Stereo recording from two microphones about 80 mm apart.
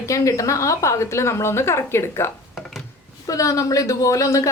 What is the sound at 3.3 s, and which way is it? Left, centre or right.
A woman's voice, left.